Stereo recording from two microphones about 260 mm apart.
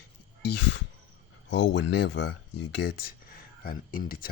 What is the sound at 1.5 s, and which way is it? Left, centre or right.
Speech, left.